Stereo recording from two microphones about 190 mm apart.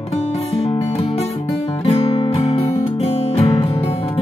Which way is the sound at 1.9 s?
30° left (ahead or behind).